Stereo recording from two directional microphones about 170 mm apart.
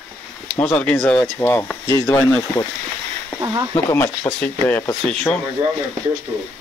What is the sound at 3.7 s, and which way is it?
Speech, 15° left (ahead or behind).